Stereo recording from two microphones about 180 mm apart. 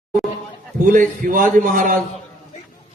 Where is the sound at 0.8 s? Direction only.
45° right (ahead or behind).